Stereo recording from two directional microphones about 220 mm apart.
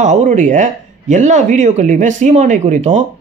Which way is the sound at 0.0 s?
35° right (ahead or behind).